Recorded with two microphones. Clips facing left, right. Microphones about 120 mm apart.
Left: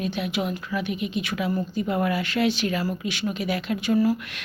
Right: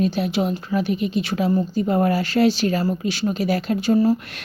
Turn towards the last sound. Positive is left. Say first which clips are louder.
# right 4 dB
turn(degrees=-30)  # may be behind; listen again after turning